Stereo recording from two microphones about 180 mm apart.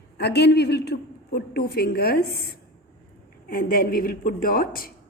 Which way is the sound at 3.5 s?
55° left (ahead or behind).